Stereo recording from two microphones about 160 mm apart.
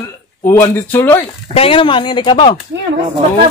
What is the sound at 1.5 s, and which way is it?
Speech, 35° left (ahead or behind).